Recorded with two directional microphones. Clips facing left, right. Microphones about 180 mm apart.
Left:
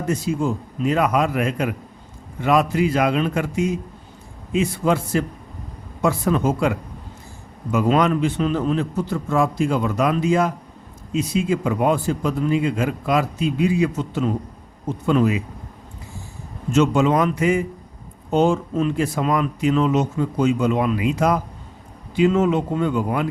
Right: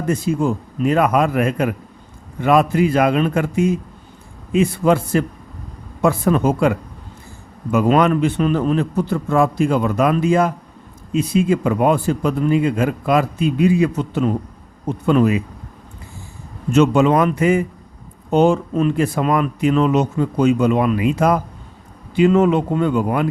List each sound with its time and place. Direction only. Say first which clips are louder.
0.1 s a man's voice: right 4 dB; 55° right (ahead or behind)
16.7 s a man's voice: right 3 dB; 60° right (ahead or behind)